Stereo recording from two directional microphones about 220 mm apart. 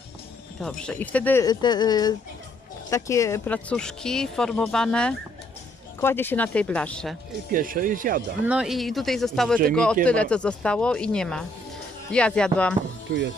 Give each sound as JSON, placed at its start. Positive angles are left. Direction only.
{"t": 0.6, "sound": "speech", "side_deg": 5}
{"t": 7.5, "sound": "speech", "side_deg": -40}
{"t": 8.4, "sound": "speech", "side_deg": -5}